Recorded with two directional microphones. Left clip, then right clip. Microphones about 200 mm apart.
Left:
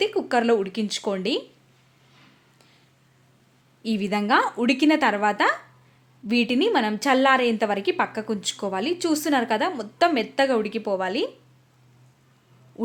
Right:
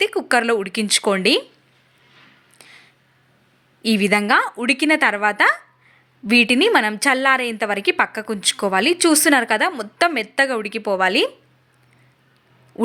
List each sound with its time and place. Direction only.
0.0 s a woman's voice: 15° right (ahead or behind)
2.6 s a sound: 10° right (ahead or behind)
3.8 s a woman's voice: 15° right (ahead or behind)